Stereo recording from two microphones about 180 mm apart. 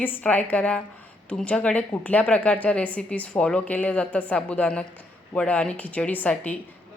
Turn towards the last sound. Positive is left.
turn(degrees=10)  # may be behind; listen again after turning